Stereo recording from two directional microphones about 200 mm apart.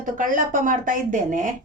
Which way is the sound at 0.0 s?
40° right (ahead or behind).